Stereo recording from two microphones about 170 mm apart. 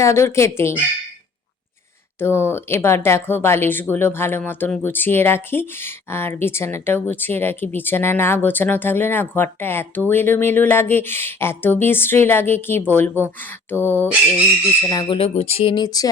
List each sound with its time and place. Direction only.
0.0 s speech: 15° left (ahead or behind)
2.1 s speech: 15° left (ahead or behind)
15.2 s speech: 35° left (ahead or behind)